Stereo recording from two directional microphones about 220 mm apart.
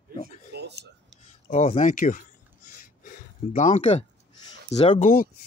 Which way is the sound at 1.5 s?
30° left (ahead or behind).